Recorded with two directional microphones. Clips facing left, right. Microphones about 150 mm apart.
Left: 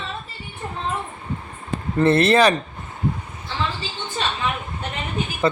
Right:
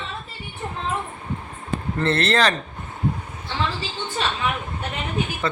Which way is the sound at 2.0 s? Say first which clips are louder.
Left 5 dB; 10° left (ahead or behind).